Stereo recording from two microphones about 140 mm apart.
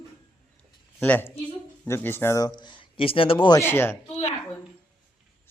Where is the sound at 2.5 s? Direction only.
35° left (ahead or behind).